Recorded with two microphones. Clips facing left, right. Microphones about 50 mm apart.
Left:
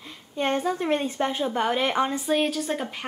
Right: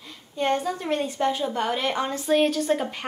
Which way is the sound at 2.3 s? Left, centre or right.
Centre.